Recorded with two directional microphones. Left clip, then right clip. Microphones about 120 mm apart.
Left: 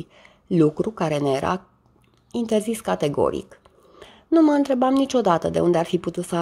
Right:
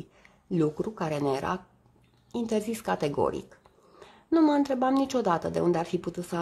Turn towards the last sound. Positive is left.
turn(degrees=25)  # may be behind; listen again after turning